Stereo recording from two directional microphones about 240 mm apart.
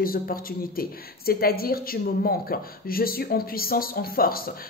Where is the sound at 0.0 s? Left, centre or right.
Left.